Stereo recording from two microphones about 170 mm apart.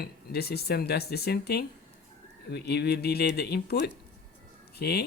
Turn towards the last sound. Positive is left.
turn(degrees=65)  # may be behind; listen again after turning